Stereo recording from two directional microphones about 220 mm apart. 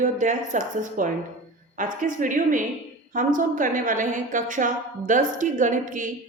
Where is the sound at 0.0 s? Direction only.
35° right (ahead or behind).